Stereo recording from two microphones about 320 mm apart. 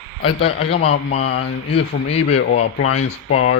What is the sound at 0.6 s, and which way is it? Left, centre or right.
Speech, centre.